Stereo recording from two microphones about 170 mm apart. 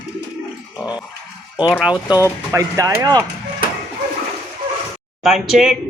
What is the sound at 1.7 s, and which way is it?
Speech, 5° right (ahead or behind).